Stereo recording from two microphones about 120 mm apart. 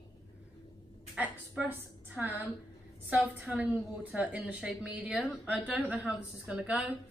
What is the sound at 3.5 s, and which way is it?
A woman's voice, 10° right (ahead or behind).